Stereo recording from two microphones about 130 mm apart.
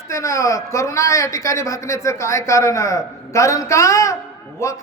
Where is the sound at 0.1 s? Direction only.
20° left (ahead or behind).